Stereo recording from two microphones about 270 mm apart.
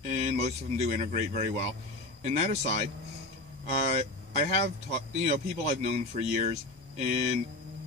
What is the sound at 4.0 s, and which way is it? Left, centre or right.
Speech, right.